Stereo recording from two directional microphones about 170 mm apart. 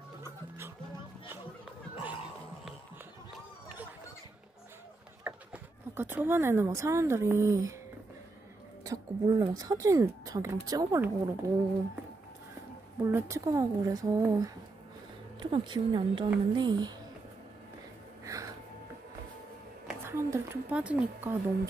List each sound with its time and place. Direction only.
5.2 s speech: 10° right (ahead or behind)
8.8 s speech: 20° right (ahead or behind)
13.0 s speech: 15° right (ahead or behind)
18.2 s music: 20° right (ahead or behind)
20.1 s speech: 15° right (ahead or behind)